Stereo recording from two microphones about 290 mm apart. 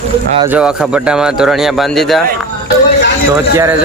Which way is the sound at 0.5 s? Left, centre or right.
Centre.